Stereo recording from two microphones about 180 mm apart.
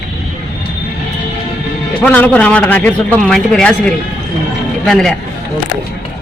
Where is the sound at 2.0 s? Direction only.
10° left (ahead or behind).